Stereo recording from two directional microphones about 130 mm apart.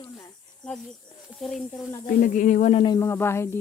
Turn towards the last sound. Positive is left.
turn(degrees=20)  # may be behind; listen again after turning